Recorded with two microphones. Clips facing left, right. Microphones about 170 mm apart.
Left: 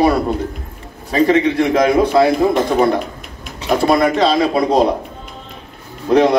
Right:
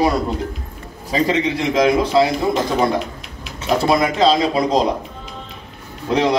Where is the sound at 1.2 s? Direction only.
55° left (ahead or behind).